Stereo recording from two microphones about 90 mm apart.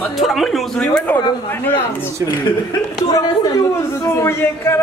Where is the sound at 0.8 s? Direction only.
10° left (ahead or behind).